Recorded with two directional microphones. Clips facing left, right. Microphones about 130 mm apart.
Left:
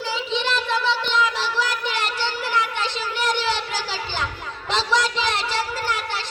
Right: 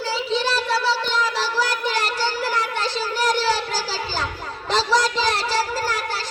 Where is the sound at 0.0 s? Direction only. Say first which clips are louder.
Right 2 dB; 35° right (ahead or behind).